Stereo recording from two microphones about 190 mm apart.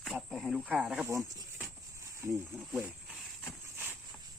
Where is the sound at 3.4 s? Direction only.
10° right (ahead or behind).